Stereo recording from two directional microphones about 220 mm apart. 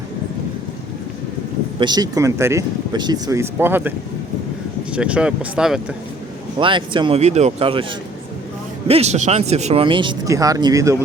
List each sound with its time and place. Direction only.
1.8 s speech: 20° right (ahead or behind)
4.9 s speech: 5° right (ahead or behind)
6.6 s speech: 20° right (ahead or behind)
8.9 s speech: 30° right (ahead or behind)